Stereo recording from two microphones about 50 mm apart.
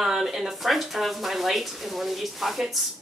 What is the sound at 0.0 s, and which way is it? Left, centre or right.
A woman's voice, centre.